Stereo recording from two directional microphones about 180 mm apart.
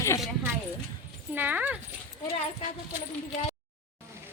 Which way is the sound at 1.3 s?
10° right (ahead or behind).